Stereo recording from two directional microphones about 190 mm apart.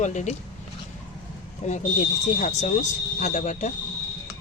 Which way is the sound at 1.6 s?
40° left (ahead or behind).